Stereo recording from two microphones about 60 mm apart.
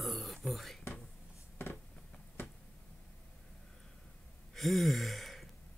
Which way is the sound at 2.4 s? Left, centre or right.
Left.